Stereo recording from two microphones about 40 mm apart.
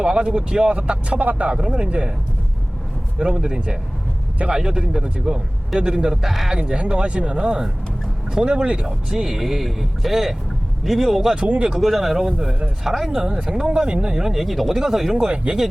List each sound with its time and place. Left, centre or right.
0.0 s speech: right
1.2 s speech: right
1.5 s speech: right
3.2 s speech: right
6.2 s speech: centre
6.5 s speech: right; by 11.3 s centre
11.4 s speech: right
11.8 s speech: centre
12.5 s speech: right
12.8 s speech: centre
13.7 s speech: right
14.3 s speech: centre
15.5 s speech: right